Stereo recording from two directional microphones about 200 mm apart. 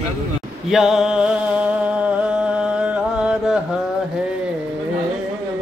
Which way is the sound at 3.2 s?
5° right (ahead or behind).